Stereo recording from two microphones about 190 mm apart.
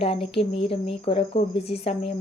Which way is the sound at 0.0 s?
30° left (ahead or behind).